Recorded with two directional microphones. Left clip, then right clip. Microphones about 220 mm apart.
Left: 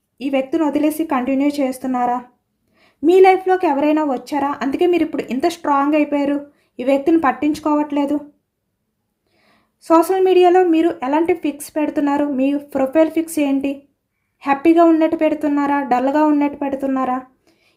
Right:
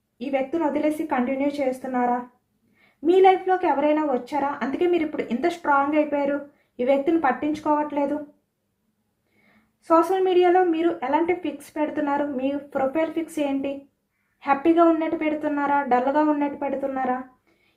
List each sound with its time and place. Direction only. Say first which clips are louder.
0.2 s a woman's voice: left 6 dB; 55° left (ahead or behind)
3.1 s a woman's voice: left 6 dB; 55° left (ahead or behind)
9.8 s a woman's voice: left 6 dB; 55° left (ahead or behind)